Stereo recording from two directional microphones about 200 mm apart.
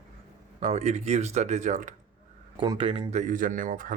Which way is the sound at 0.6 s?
35° right (ahead or behind).